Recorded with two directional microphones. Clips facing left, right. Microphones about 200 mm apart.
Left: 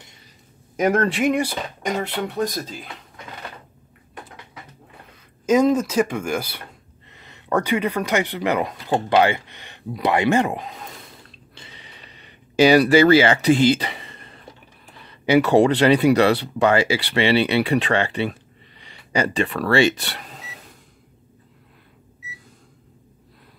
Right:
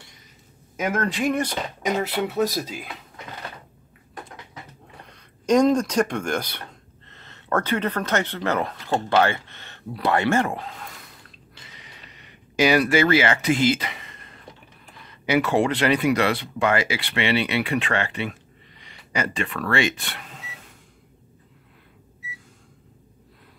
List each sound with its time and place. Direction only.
0.7 s a man's voice: 35° left (ahead or behind)
1.3 s speech: 10° left (ahead or behind); by 3.0 s 10° right (ahead or behind)
5.1 s speech: 5° left (ahead or behind); by 11.1 s 20° left (ahead or behind)
11.5 s a sound: 30° left (ahead or behind)
15.2 s speech: 30° left (ahead or behind)